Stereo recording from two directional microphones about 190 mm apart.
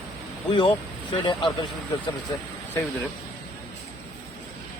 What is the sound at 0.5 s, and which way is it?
Speech, 30° left (ahead or behind).